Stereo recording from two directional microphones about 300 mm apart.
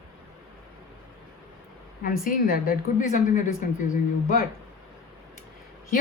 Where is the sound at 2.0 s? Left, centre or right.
Left.